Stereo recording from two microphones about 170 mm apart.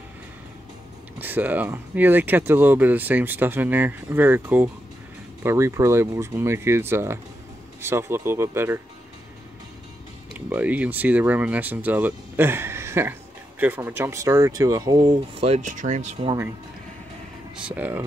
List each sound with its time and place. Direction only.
1.1 s speech: 10° right (ahead or behind)
10.3 s speech: 10° right (ahead or behind); by 16.3 s 45° right (ahead or behind)
17.6 s speech: 5° right (ahead or behind)